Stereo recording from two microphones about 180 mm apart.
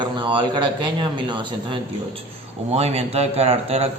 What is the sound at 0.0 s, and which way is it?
A man's voice, 25° right (ahead or behind).